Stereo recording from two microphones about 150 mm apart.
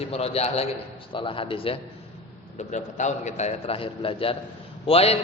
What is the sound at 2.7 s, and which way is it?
A man's voice, 55° left (ahead or behind).